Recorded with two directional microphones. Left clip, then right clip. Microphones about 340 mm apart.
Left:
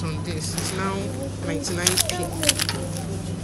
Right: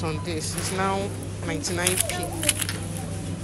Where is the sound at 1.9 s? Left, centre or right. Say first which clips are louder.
Left 3 dB; left.